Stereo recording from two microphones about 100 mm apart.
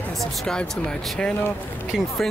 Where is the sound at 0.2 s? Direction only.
10° left (ahead or behind).